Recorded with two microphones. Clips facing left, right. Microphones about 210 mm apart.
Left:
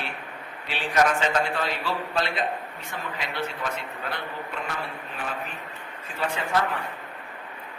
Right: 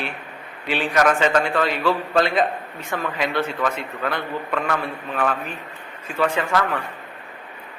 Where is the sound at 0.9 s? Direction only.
85° right.